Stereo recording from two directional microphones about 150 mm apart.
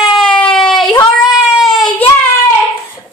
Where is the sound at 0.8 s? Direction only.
25° left (ahead or behind).